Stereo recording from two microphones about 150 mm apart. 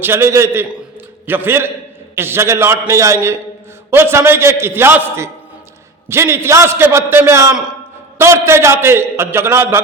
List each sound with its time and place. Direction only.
0.0 s a man's voice: 15° right (ahead or behind)